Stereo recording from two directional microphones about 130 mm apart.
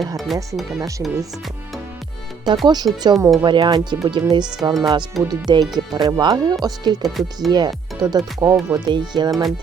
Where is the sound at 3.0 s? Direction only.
25° right (ahead or behind).